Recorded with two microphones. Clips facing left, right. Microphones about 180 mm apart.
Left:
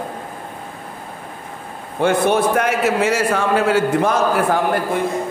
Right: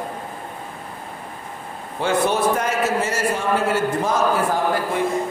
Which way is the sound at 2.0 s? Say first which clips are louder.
Left 4 dB; 55° left (ahead or behind).